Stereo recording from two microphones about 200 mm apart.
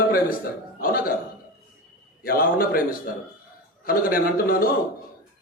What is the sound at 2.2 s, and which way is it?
Speech, 45° left (ahead or behind).